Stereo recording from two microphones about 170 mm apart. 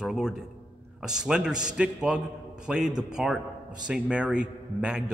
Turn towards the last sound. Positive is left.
turn(degrees=-5)  # may be behind; listen again after turning